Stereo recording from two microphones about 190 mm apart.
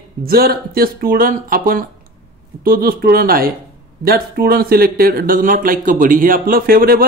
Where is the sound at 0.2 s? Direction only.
50° right (ahead or behind).